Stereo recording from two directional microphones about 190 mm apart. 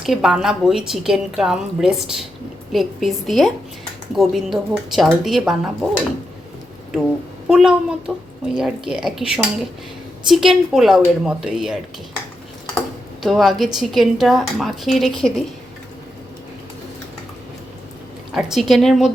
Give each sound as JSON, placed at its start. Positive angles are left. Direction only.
{"t": 0.0, "sound": "a woman's voice", "side_deg": 0}
{"t": 7.4, "sound": "a woman's voice", "side_deg": -5}
{"t": 13.2, "sound": "a woman's voice", "side_deg": 0}
{"t": 18.3, "sound": "a woman's voice", "side_deg": 0}